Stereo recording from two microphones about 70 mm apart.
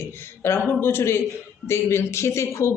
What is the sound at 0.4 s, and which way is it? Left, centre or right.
Speech, left.